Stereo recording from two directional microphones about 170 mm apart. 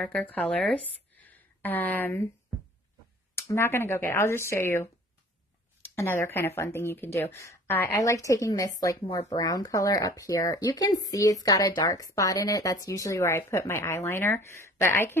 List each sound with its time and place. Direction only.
0.0 s speech: 5° left (ahead or behind)
1.2 s a sound: 10° left (ahead or behind)
3.3 s speech: 15° left (ahead or behind)
5.9 s speech: 15° left (ahead or behind)